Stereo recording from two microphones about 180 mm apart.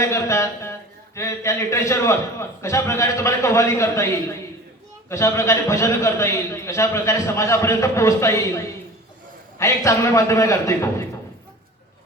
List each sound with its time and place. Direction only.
0.0 s speech: 15° left (ahead or behind)